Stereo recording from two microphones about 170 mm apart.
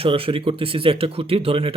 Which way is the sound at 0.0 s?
30° right (ahead or behind).